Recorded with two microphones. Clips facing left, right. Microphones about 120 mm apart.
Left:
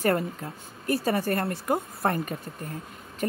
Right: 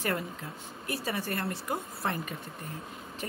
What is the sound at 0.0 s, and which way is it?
Speech, 50° left (ahead or behind).